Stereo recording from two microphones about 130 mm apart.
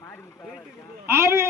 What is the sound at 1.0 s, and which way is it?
Speech, 20° right (ahead or behind).